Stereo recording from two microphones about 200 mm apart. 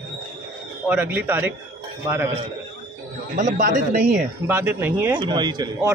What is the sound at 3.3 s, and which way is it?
Speech, 40° right (ahead or behind).